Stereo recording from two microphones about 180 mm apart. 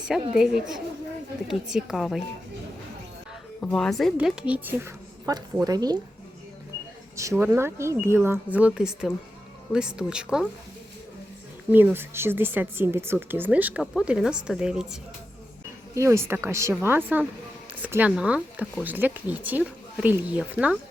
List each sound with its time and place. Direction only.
0.0 s a woman's voice: 5° right (ahead or behind)
3.6 s a woman's voice: centre (ahead or behind); by 6.0 s 20° right (ahead or behind)
7.2 s a woman's voice: 15° right (ahead or behind)
11.7 s a woman's voice: 10° right (ahead or behind)
16.0 s a woman's voice: 15° right (ahead or behind)